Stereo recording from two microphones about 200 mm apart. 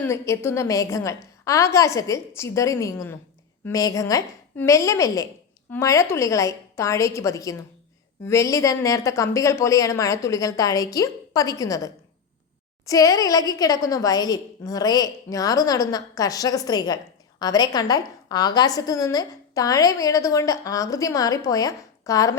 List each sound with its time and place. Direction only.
0.0 s a woman's voice: 10° left (ahead or behind)